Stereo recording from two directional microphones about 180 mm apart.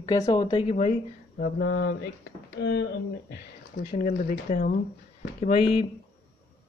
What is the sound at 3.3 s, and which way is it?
Speech, 55° left (ahead or behind).